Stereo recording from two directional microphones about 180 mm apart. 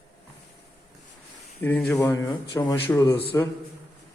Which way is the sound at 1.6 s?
10° left (ahead or behind).